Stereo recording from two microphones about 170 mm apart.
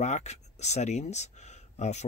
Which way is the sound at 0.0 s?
40° left (ahead or behind).